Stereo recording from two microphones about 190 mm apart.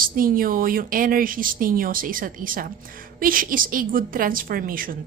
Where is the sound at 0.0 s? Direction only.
50° right (ahead or behind).